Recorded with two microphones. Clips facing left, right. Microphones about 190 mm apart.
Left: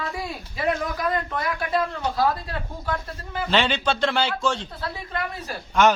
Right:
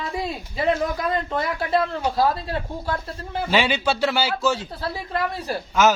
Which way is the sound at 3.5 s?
10° right (ahead or behind).